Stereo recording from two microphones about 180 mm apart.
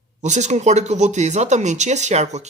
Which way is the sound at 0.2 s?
40° right (ahead or behind).